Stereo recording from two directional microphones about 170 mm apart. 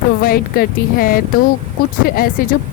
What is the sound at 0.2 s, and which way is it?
Speech, 60° left (ahead or behind).